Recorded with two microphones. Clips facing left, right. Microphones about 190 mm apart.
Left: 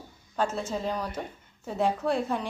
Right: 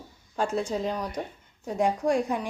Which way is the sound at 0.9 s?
10° right (ahead or behind).